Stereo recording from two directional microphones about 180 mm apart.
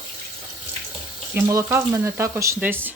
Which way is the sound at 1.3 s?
15° right (ahead or behind).